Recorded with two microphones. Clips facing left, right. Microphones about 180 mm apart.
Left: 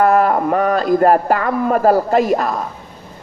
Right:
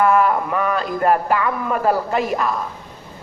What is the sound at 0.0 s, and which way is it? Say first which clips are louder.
Speech: left 3 dB; 45° left (ahead or behind).